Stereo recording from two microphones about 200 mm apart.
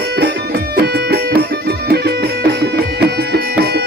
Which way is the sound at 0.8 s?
55° right (ahead or behind).